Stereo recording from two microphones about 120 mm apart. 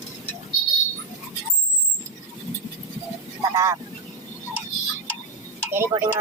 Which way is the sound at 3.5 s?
30° right (ahead or behind).